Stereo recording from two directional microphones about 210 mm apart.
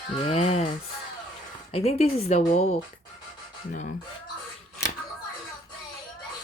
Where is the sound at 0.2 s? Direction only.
30° left (ahead or behind).